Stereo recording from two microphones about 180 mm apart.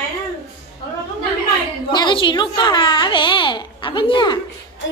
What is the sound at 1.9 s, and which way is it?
A child's voice, 25° left (ahead or behind).